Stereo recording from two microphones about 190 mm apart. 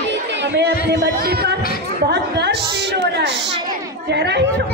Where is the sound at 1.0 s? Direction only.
55° right (ahead or behind).